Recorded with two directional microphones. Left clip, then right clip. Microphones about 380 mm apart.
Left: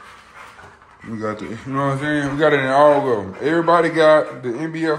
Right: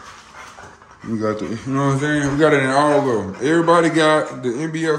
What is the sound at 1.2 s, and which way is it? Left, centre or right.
A man's voice, centre.